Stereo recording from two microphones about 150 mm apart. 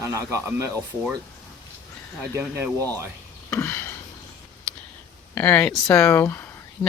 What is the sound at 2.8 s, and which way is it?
Speech, 20° right (ahead or behind).